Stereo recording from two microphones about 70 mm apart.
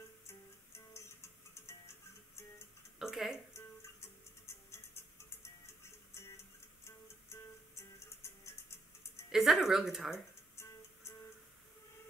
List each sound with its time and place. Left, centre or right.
0.3 s music: left
3.0 s a sound: centre
6.1 s music: left
9.3 s speech: centre
10.5 s music: left